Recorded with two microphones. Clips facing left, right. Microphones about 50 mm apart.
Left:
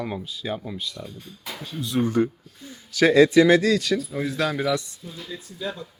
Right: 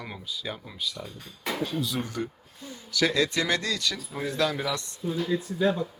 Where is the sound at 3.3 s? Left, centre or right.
Centre.